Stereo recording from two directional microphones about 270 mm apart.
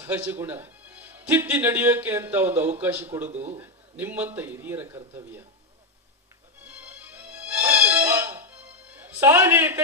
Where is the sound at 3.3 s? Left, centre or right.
Right.